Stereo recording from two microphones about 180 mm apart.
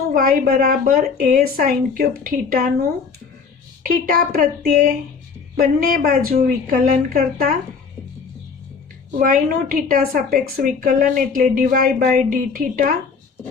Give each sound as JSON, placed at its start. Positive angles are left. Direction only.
{"t": 0.1, "sound": "a woman's voice", "side_deg": -55}
{"t": 3.9, "sound": "a woman's voice", "side_deg": -55}
{"t": 9.1, "sound": "a woman's voice", "side_deg": -50}